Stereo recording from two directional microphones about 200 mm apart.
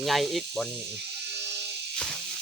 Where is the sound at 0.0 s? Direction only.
Centre (ahead or behind).